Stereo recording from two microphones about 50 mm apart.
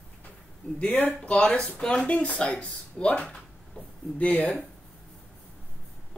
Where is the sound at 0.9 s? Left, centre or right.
Left.